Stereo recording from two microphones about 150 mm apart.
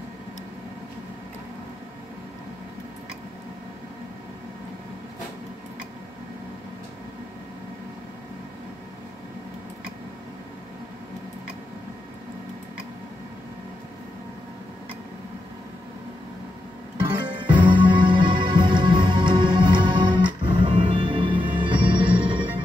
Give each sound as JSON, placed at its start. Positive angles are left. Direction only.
{"t": 17.0, "sound": "music", "side_deg": -30}